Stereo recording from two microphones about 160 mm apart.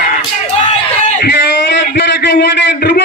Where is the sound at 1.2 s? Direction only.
90° left.